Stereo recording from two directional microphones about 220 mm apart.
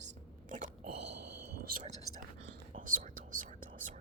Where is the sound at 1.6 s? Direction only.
40° right (ahead or behind).